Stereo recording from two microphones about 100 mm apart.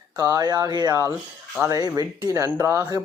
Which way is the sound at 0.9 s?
30° right (ahead or behind).